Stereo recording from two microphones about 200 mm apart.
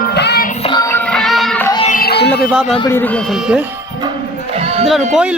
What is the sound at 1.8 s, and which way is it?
Music, 45° left (ahead or behind).